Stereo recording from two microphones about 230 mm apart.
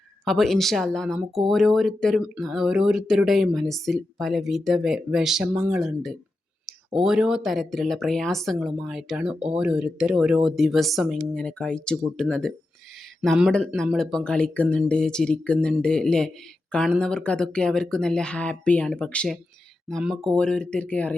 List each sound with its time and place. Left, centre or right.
0.3 s speech: centre